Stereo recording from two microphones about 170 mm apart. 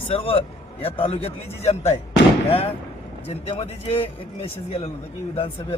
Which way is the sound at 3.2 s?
35° left (ahead or behind).